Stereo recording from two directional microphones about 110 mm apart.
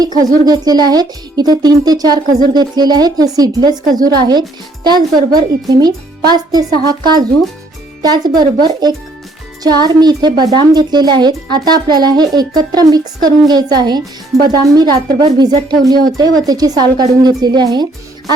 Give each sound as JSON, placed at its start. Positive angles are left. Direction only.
{"t": 0.2, "sound": "speech", "side_deg": -35}